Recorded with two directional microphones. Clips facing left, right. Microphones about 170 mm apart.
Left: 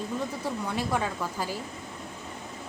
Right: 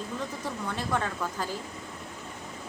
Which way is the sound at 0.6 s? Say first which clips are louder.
Even; 10° left (ahead or behind).